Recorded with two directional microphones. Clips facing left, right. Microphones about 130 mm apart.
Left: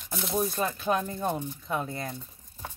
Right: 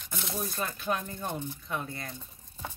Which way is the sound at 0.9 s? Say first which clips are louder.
Left 5 dB; 30° left (ahead or behind).